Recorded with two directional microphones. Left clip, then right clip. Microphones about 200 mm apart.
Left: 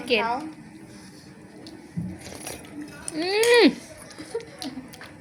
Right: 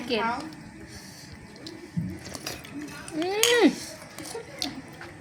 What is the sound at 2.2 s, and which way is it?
Music, 5° left (ahead or behind).